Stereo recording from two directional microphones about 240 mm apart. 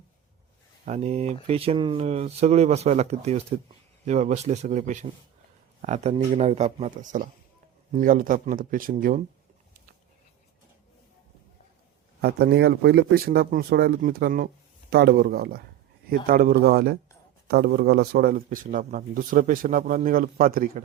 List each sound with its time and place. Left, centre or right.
0.9 s speech: right
12.2 s speech: right